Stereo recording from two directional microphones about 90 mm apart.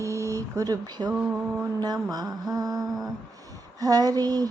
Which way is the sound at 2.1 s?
45° right (ahead or behind).